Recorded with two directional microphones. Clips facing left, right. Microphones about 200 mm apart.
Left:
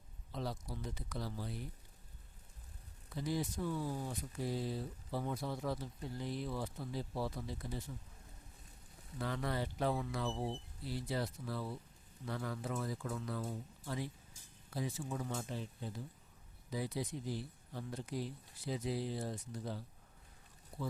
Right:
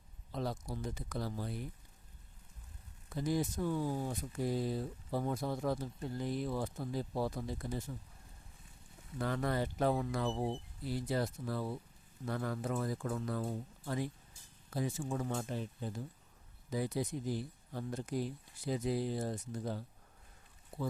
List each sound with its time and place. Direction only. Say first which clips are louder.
0.3 s speech: right 3 dB; 50° right (ahead or behind)
3.2 s speech: right 4 dB; 45° right (ahead or behind)
9.1 s speech: right 4 dB; 50° right (ahead or behind)
16.6 s speech: right 4 dB; 50° right (ahead or behind)